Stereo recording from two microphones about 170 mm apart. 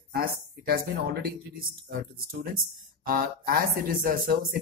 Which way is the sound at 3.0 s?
60° right (ahead or behind).